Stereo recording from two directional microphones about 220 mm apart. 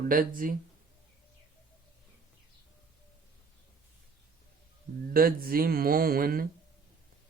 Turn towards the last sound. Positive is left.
turn(degrees=-40)  # may be behind; listen again after turning